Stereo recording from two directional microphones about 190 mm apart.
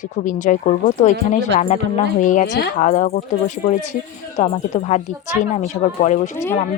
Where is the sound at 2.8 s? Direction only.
40° left (ahead or behind).